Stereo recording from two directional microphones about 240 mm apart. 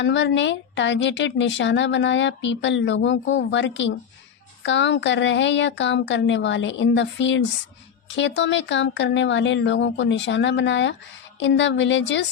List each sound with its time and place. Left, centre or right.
0.0 s a woman's voice: left